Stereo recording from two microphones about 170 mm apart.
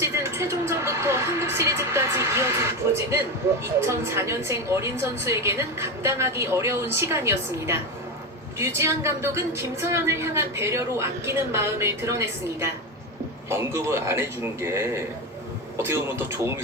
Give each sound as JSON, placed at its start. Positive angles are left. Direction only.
{"t": 0.0, "sound": "a woman's voice", "side_deg": -15}